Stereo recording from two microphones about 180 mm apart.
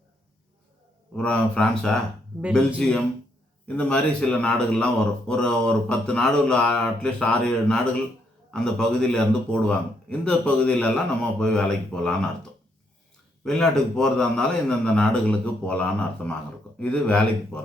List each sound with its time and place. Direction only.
1.1 s speech: 5° left (ahead or behind)